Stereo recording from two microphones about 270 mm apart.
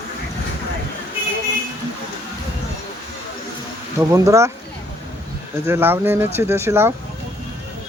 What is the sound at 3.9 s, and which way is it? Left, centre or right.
Speech, centre.